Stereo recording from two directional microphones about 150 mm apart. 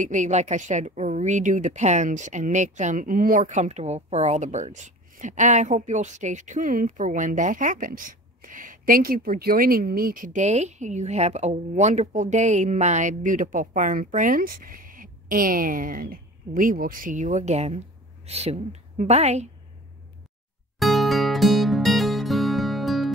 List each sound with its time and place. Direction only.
0.0 s a woman's voice: 55° right (ahead or behind)
20.8 s music: centre (ahead or behind)